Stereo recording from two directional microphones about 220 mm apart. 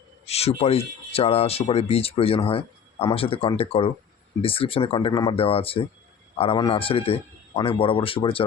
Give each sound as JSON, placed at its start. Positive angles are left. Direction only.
{"t": 0.3, "sound": "speech", "side_deg": 30}